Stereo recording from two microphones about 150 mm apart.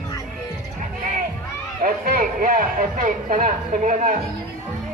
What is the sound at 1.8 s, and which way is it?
Speech, 70° right (ahead or behind).